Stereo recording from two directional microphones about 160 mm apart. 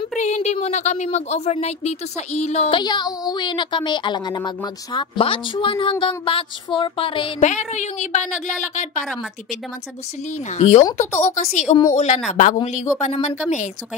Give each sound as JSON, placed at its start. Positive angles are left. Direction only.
{"t": 0.2, "sound": "a woman's voice", "side_deg": 45}
{"t": 2.8, "sound": "speech", "side_deg": 25}
{"t": 7.4, "sound": "a woman's voice", "side_deg": 45}
{"t": 10.5, "sound": "a woman's voice", "side_deg": 45}